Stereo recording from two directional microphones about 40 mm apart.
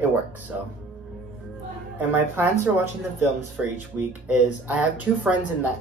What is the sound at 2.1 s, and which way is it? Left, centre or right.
Speech, right.